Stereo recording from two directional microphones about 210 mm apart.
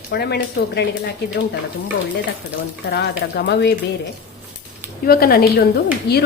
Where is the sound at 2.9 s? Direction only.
50° left (ahead or behind).